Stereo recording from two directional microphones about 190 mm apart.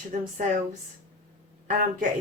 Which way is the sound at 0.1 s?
40° right (ahead or behind).